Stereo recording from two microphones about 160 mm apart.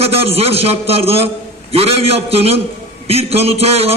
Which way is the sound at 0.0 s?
40° right (ahead or behind).